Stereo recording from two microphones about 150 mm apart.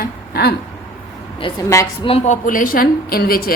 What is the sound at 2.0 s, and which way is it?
A woman's voice, 45° left (ahead or behind).